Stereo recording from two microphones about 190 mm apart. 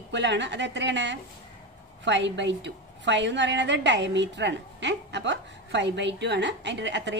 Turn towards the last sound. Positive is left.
turn(degrees=-70)  # may be behind; listen again after turning